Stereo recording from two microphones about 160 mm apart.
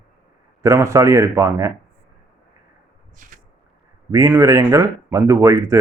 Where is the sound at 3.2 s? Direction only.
55° right (ahead or behind).